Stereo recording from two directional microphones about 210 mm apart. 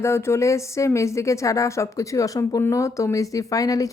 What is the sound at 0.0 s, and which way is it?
Speech, 10° left (ahead or behind).